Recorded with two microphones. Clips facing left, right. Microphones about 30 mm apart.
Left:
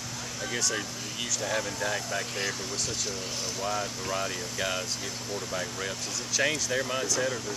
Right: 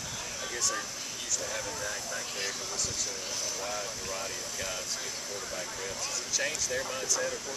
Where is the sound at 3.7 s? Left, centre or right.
Left.